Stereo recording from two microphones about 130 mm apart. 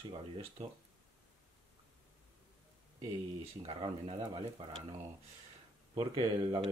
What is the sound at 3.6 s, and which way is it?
Speech, 45° right (ahead or behind).